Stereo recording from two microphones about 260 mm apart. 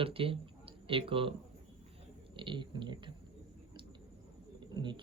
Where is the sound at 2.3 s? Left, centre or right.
Centre.